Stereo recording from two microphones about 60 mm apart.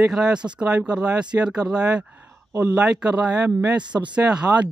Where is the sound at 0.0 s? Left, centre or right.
Centre.